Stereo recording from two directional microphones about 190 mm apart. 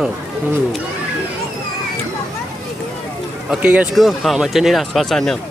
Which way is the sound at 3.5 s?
5° right (ahead or behind).